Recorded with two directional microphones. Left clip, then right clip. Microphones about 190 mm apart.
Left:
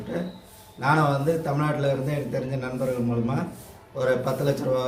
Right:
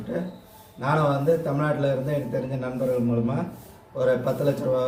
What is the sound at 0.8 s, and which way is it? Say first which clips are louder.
A man's voice: even; 5° left (ahead or behind).